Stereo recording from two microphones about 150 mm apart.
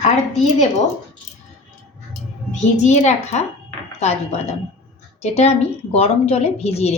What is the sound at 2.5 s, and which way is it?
A woman's voice, 50° left (ahead or behind).